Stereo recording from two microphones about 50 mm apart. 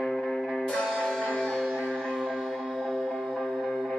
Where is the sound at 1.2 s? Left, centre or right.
Left.